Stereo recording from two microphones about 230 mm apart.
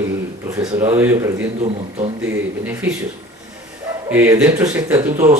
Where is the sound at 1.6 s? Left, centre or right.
Right.